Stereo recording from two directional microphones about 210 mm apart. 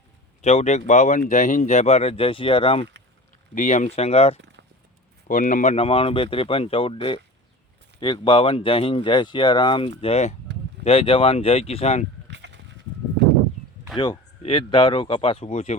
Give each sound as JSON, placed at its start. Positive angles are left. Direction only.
{"t": 0.4, "sound": "speech", "side_deg": 35}
{"t": 3.5, "sound": "speech", "side_deg": 35}
{"t": 12.3, "sound": "goat", "side_deg": -55}
{"t": 13.9, "sound": "speech", "side_deg": 20}